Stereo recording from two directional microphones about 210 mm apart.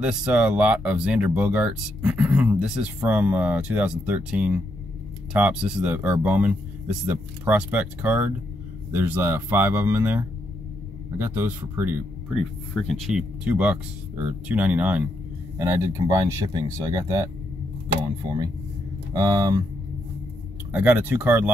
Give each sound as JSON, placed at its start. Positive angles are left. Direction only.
{"t": 0.0, "sound": "speech", "side_deg": -5}
{"t": 12.7, "sound": "speech", "side_deg": 0}
{"t": 19.1, "sound": "speech", "side_deg": -20}
{"t": 20.7, "sound": "speech", "side_deg": -5}